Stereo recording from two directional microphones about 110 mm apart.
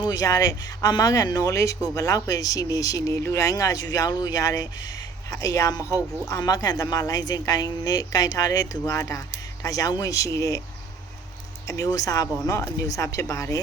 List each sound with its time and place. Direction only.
0.0 s speech: 35° left (ahead or behind)
11.7 s speech: 30° left (ahead or behind)